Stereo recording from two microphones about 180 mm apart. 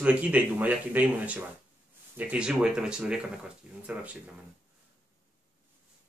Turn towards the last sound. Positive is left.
turn(degrees=-10)  # may be behind; listen again after turning